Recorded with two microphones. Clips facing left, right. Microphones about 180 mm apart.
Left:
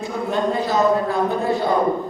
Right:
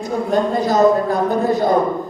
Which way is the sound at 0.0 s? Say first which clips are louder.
Right 4 dB; 40° right (ahead or behind).